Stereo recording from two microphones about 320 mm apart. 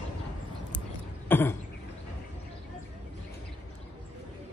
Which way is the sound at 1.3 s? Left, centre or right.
Centre.